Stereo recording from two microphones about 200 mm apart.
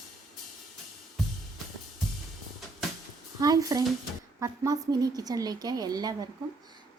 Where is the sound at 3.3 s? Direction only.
20° right (ahead or behind).